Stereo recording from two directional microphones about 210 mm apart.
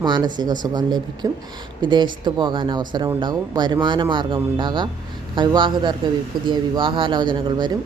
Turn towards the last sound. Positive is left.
turn(degrees=-20)  # may be behind; listen again after turning